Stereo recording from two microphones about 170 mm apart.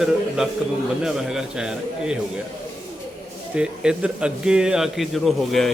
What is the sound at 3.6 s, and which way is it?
A man's voice, 5° right (ahead or behind).